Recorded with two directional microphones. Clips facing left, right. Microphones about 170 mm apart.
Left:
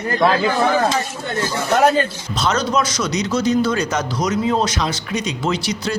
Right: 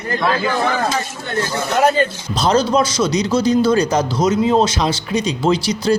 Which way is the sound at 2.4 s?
30° right (ahead or behind).